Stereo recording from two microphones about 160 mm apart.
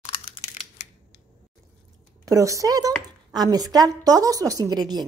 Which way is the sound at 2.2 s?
20° right (ahead or behind).